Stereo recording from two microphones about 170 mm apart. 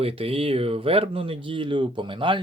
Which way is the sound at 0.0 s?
35° right (ahead or behind).